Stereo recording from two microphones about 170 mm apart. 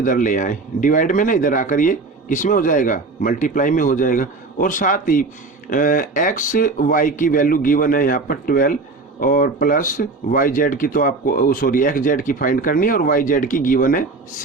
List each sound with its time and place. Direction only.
0.0 s speech: 50° left (ahead or behind)